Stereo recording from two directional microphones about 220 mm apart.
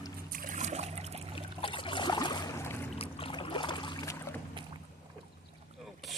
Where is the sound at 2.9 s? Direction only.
25° left (ahead or behind).